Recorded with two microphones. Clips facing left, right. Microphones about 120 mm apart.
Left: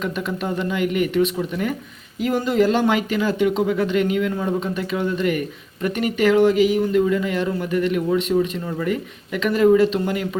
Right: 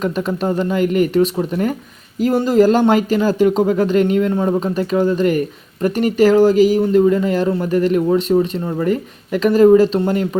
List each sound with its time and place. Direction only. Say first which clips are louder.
0.0 s speech: right 6 dB; 35° right (ahead or behind)